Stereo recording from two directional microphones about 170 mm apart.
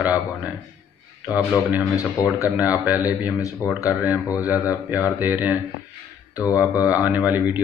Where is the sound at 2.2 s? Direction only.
20° left (ahead or behind).